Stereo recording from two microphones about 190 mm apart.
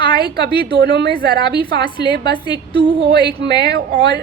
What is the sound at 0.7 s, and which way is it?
Speech, 60° right (ahead or behind).